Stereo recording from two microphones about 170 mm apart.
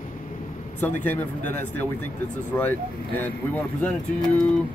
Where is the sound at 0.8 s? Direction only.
10° left (ahead or behind).